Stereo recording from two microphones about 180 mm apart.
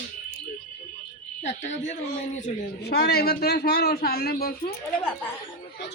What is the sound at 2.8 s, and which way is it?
A man's voice, 60° left (ahead or behind).